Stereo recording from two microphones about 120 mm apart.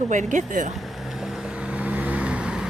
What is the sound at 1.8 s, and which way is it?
Vehicle, 10° right (ahead or behind).